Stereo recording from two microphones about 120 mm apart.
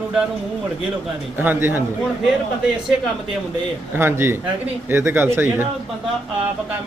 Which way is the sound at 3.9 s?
20° right (ahead or behind).